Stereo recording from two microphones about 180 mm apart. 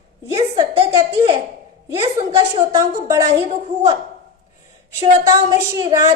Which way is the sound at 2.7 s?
20° right (ahead or behind).